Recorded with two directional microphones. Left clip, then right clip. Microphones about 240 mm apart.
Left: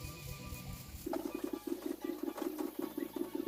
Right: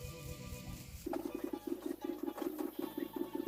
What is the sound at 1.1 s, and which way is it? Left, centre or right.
Music, centre.